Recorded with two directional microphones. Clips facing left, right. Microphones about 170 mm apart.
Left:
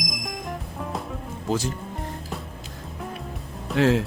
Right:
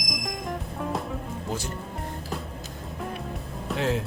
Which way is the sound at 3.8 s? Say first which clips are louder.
Left 7 dB; 90° left.